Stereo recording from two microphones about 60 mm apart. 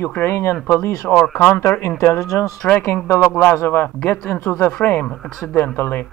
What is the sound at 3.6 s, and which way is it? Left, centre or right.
Speech, left.